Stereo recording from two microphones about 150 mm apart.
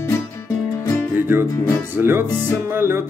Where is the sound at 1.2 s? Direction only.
15° right (ahead or behind).